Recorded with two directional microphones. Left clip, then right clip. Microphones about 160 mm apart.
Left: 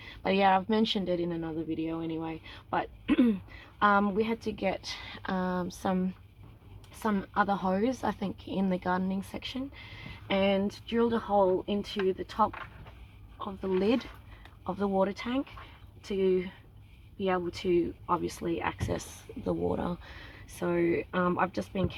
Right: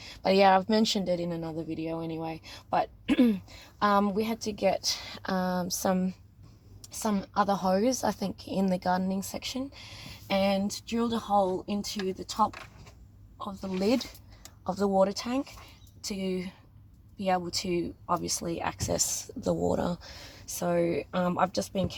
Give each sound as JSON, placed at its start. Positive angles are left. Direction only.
{"t": 0.0, "sound": "speech", "side_deg": -50}
{"t": 13.4, "sound": "speech", "side_deg": -40}